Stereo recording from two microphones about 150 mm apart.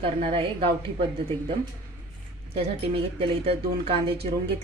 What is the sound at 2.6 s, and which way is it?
Speech, 40° right (ahead or behind).